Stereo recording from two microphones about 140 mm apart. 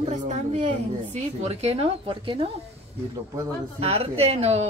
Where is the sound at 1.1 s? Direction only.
50° right (ahead or behind).